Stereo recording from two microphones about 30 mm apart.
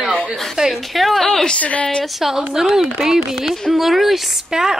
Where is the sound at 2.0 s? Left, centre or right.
Centre.